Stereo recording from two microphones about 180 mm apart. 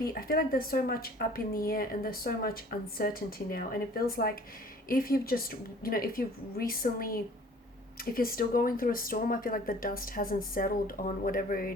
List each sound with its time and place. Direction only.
0.0 s speech: 55° left (ahead or behind)